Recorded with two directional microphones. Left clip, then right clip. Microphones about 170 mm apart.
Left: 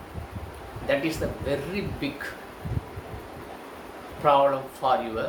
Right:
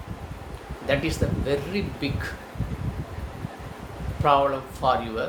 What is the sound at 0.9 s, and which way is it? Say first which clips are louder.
Speech: right 1 dB; 15° right (ahead or behind).